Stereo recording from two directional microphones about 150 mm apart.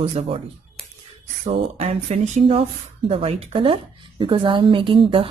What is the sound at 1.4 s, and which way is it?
A woman's voice, 40° right (ahead or behind).